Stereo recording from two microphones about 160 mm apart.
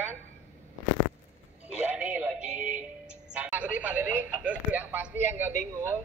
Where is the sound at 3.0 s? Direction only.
10° right (ahead or behind).